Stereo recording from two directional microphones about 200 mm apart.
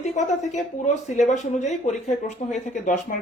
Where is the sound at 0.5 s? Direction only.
35° left (ahead or behind).